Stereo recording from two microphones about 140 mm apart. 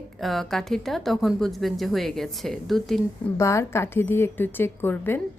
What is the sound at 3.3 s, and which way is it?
A woman's voice, 20° left (ahead or behind).